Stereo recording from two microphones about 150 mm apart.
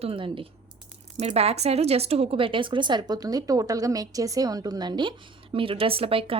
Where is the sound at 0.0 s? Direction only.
35° right (ahead or behind).